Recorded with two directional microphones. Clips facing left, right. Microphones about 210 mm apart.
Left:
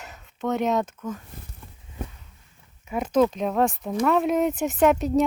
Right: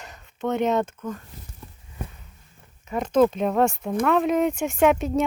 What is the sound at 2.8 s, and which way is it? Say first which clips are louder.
Speech: right 2 dB; 5° left (ahead or behind).